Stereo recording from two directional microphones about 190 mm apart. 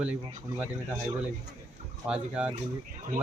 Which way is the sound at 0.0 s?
5° right (ahead or behind).